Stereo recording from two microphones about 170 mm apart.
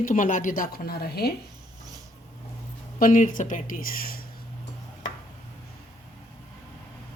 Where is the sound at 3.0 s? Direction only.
55° left (ahead or behind).